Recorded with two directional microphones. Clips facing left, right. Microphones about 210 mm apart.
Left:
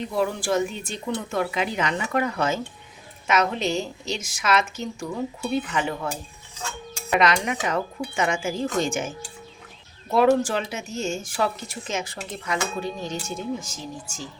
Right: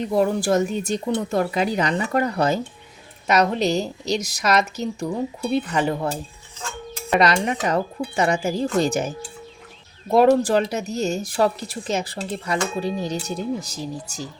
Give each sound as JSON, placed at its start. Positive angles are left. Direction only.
{"t": 0.1, "sound": "speech", "side_deg": -40}
{"t": 7.2, "sound": "speech", "side_deg": -35}